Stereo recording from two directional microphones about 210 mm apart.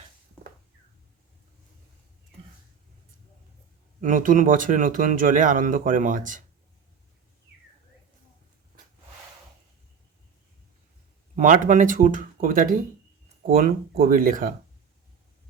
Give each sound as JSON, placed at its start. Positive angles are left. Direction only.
{"t": 4.0, "sound": "speech", "side_deg": -40}
{"t": 11.3, "sound": "speech", "side_deg": -40}